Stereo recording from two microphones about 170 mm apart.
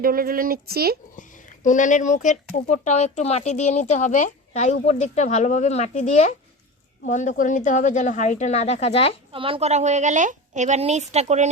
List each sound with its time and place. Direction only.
0.0 s speech: 60° right (ahead or behind)
1.1 s speech: 50° left (ahead or behind)
9.3 s a woman's voice: 30° right (ahead or behind)